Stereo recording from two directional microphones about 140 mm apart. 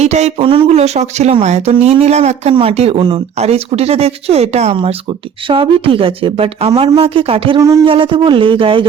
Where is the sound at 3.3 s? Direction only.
50° right (ahead or behind); by 7.0 s 35° right (ahead or behind).